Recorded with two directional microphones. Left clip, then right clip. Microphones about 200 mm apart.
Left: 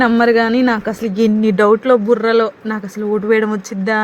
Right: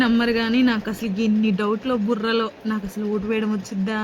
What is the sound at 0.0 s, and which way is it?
Speech, 20° left (ahead or behind).